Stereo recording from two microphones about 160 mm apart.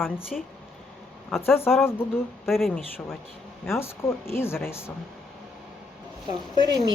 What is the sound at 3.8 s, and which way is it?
Speech, 15° left (ahead or behind).